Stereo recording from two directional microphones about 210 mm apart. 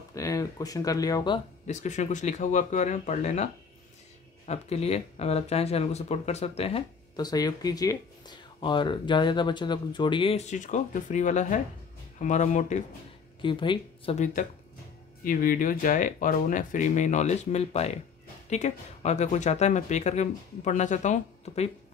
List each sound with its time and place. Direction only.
0.1 s speech: 15° left (ahead or behind)
1.7 s speech: 35° left (ahead or behind)
4.5 s speech: 30° left (ahead or behind)
13.4 s speech: 25° left (ahead or behind)
14.1 s speech: 35° left (ahead or behind)